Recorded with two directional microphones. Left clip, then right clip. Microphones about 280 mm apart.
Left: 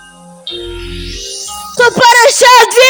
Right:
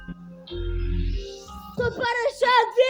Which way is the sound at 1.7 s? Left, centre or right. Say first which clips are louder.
Left 19 dB; left.